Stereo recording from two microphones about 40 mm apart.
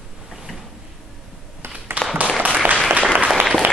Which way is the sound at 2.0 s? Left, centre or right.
Right.